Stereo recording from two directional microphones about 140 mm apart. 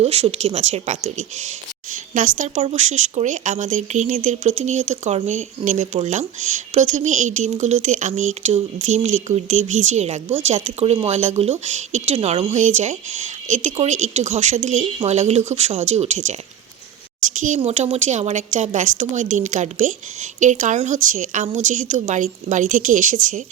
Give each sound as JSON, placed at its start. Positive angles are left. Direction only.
{"t": 0.0, "sound": "speech", "side_deg": -45}
{"t": 1.9, "sound": "speech", "side_deg": -70}
{"t": 2.6, "sound": "speech", "side_deg": -55}
{"t": 17.6, "sound": "speech", "side_deg": -45}